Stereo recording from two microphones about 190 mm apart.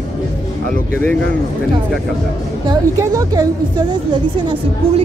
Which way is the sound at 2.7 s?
20° right (ahead or behind).